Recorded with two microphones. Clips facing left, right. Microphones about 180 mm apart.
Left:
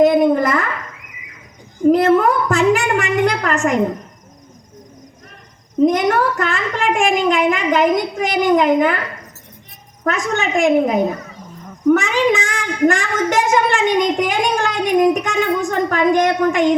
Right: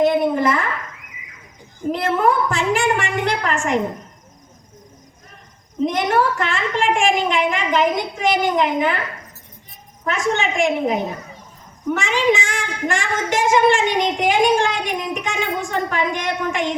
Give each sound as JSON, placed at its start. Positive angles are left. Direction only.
{"t": 0.0, "sound": "a sound", "side_deg": 45}
{"t": 1.9, "sound": "a woman's voice", "side_deg": 45}
{"t": 5.8, "sound": "a woman's voice", "side_deg": 45}
{"t": 10.0, "sound": "a woman's voice", "side_deg": 40}